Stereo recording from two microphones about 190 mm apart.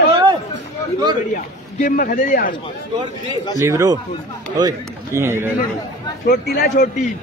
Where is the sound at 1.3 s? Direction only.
45° left (ahead or behind).